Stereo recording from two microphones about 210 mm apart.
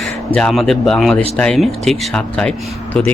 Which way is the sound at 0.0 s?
5° left (ahead or behind).